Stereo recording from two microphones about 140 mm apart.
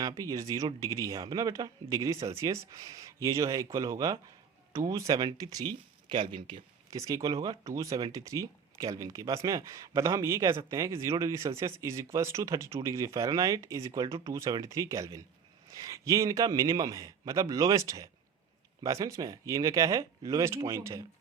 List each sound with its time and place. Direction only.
0.0 s speech: 25° right (ahead or behind)